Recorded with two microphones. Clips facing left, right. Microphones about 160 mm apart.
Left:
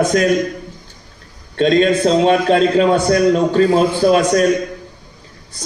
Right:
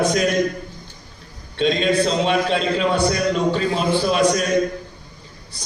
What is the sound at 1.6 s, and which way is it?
A man's voice, 45° left (ahead or behind).